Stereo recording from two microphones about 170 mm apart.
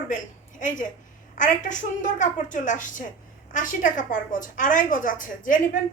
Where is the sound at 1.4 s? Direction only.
50° left (ahead or behind).